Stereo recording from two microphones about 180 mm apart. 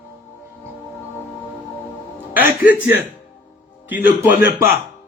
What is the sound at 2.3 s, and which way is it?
Speech, 10° right (ahead or behind).